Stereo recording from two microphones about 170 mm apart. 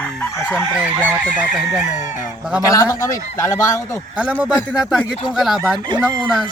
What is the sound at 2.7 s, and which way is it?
Speech, 20° left (ahead or behind).